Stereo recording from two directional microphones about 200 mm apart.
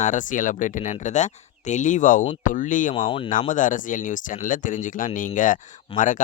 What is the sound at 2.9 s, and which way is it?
Speech, 25° left (ahead or behind).